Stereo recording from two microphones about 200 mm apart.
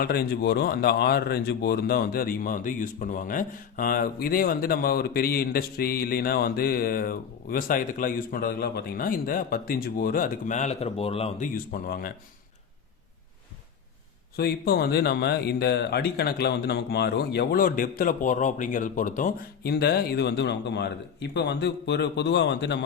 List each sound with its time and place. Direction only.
0.0 s speech: 50° left (ahead or behind)
14.3 s speech: 50° left (ahead or behind)
19.7 s a man's voice: 55° left (ahead or behind)